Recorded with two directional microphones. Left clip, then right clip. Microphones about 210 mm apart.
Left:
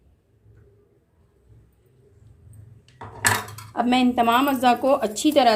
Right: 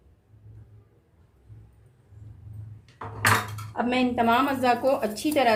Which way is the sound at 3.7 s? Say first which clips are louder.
Left 5 dB; 40° left (ahead or behind).